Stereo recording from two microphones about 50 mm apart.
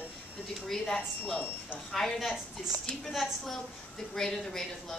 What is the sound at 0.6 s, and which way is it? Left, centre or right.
Speech, centre.